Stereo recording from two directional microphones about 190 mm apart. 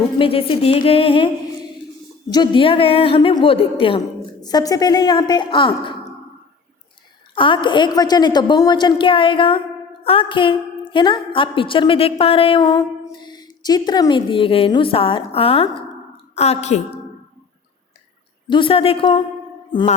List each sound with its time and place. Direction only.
0.2 s a woman's voice: 30° left (ahead or behind)
2.3 s a woman's voice: 25° left (ahead or behind)
7.3 s a woman's voice: 25° left (ahead or behind)
18.4 s a woman's voice: 25° left (ahead or behind)